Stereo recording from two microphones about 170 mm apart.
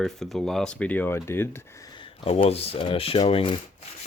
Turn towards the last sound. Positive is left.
turn(degrees=30)  # may be behind; listen again after turning